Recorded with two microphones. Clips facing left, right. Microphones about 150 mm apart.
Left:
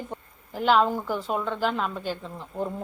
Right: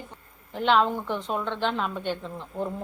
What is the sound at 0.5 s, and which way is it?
A woman's voice, 5° left (ahead or behind).